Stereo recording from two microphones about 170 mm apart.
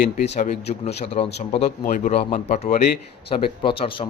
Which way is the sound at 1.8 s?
50° left (ahead or behind).